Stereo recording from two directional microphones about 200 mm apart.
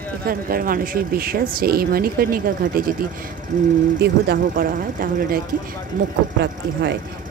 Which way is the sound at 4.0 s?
50° right (ahead or behind).